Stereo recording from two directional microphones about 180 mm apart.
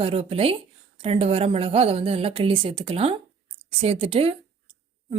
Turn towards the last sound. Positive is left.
turn(degrees=-30)  # may be behind; listen again after turning